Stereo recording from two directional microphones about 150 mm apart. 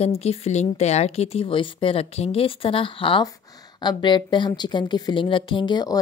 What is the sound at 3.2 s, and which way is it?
A woman's voice, 25° left (ahead or behind).